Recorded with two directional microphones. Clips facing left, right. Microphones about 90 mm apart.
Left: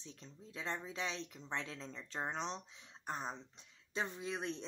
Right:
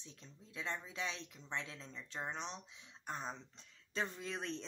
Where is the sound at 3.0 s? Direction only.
20° left (ahead or behind).